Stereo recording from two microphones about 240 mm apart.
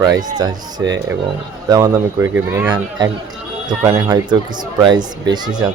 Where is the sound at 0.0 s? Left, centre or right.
Centre.